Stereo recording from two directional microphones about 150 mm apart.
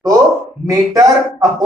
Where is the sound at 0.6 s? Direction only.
25° right (ahead or behind).